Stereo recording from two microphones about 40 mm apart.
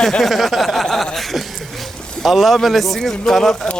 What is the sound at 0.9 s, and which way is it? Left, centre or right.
Chuckle, centre.